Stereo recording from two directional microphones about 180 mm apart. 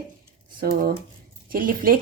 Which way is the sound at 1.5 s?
50° right (ahead or behind).